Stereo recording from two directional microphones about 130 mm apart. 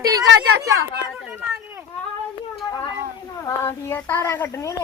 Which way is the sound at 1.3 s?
15° right (ahead or behind).